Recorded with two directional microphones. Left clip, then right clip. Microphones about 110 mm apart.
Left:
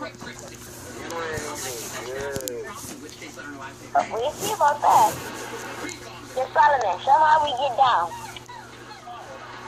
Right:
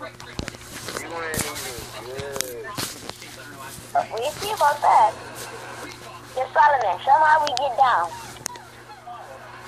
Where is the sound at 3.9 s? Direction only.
Centre (ahead or behind).